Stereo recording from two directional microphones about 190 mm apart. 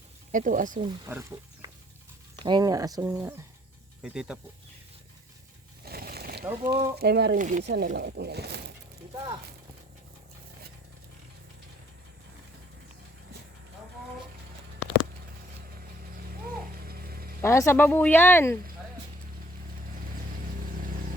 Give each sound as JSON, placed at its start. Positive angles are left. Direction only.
{"t": 0.3, "sound": "speech", "side_deg": -45}
{"t": 0.9, "sound": "speech", "side_deg": -15}
{"t": 5.8, "sound": "a sound", "side_deg": -55}
{"t": 6.4, "sound": "speech", "side_deg": -15}
{"t": 6.9, "sound": "speech", "side_deg": -60}
{"t": 7.3, "sound": "speech", "side_deg": -40}
{"t": 7.6, "sound": "speech", "side_deg": -60}
{"t": 16.3, "sound": "a sound", "side_deg": -50}
{"t": 17.4, "sound": "speech", "side_deg": 15}
{"t": 20.1, "sound": "music", "side_deg": -45}